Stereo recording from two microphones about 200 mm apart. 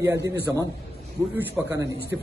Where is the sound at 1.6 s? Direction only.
15° right (ahead or behind).